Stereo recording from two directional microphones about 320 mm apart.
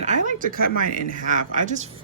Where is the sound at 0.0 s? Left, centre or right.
Right.